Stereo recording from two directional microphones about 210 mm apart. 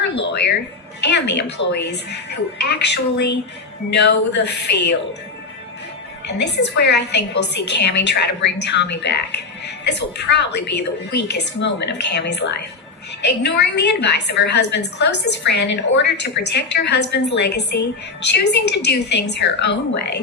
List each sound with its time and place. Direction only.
0.3 s a sound: 50° left (ahead or behind)
1.0 s a woman's voice: 55° left (ahead or behind)
6.7 s a woman's voice: 55° left (ahead or behind)